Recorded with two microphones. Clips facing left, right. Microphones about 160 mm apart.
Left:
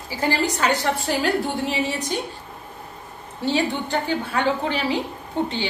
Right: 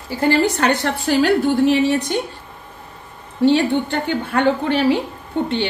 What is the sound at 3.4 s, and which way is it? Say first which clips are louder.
A woman's voice: right 8 dB; 60° right (ahead or behind).